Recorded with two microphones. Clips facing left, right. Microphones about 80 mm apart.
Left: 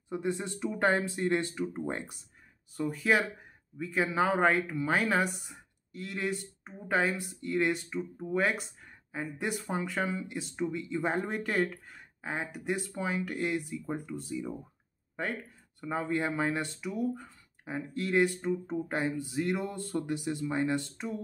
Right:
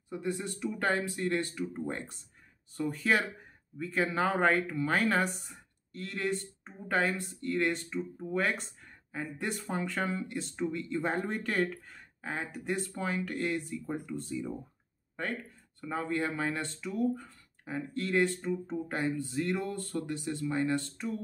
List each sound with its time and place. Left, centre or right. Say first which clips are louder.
0.1 s speech: left 2 dB; left
2.8 s speech: left 1 dB; centre
15.8 s speech: left 1 dB; centre